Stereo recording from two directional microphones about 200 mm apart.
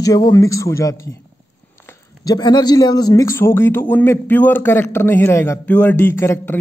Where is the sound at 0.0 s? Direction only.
20° left (ahead or behind).